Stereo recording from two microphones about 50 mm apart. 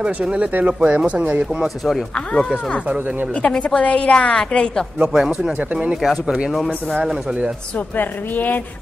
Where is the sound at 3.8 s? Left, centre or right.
Left.